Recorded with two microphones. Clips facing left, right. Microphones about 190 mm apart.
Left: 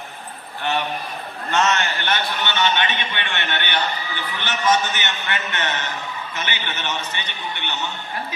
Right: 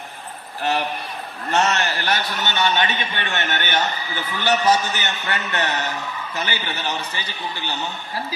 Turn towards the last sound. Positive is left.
turn(degrees=-35)  # may be behind; listen again after turning